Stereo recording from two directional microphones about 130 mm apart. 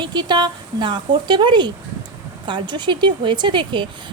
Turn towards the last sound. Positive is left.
turn(degrees=-35)  # may be behind; listen again after turning